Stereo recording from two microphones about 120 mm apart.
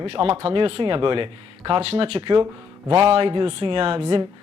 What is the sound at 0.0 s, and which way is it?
Speech, 50° right (ahead or behind).